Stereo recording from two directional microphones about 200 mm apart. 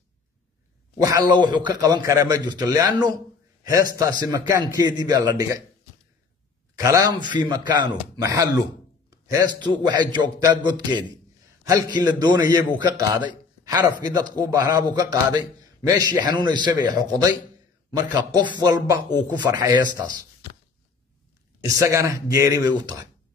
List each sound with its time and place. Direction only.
1.0 s a man's voice: 20° right (ahead or behind)
6.7 s a man's voice: 15° right (ahead or behind)
13.2 s a sound: 10° right (ahead or behind)
13.7 s a man's voice: 20° right (ahead or behind)
21.6 s speech: 15° right (ahead or behind)